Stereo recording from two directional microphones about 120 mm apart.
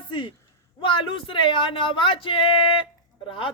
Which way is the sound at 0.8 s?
45° left (ahead or behind).